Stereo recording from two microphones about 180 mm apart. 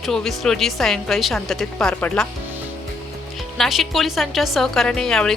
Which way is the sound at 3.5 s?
Centre (ahead or behind).